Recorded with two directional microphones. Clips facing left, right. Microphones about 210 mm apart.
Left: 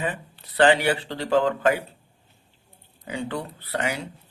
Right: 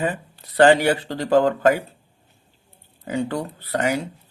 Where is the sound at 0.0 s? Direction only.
40° right (ahead or behind).